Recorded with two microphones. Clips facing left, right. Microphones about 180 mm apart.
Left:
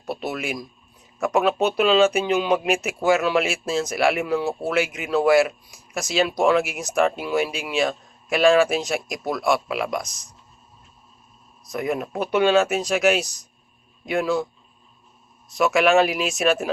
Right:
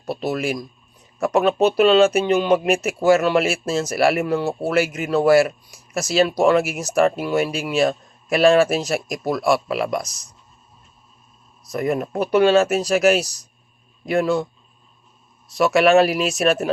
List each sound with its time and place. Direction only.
0.0 s speech: centre (ahead or behind)
11.7 s speech: centre (ahead or behind)
15.5 s speech: centre (ahead or behind)